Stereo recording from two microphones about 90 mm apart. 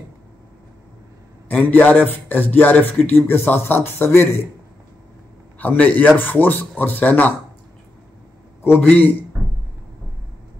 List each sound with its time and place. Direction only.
1.5 s speech: 15° left (ahead or behind)
5.6 s a man's voice: 15° left (ahead or behind)
8.6 s speech: 20° left (ahead or behind)